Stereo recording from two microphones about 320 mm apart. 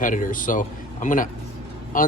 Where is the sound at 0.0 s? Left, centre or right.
Left.